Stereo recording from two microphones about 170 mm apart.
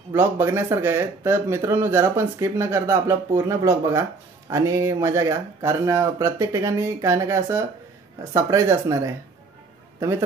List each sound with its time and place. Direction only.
0.1 s speech: 15° right (ahead or behind)